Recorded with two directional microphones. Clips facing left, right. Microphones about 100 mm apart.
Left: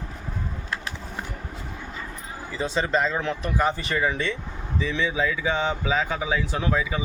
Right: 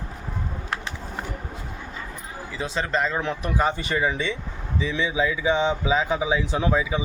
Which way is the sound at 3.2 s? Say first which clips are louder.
Even; 15° right (ahead or behind).